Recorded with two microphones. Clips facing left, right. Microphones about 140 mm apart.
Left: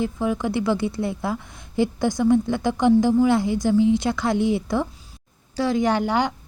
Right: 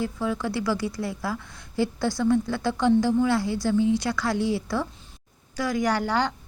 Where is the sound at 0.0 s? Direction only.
20° left (ahead or behind).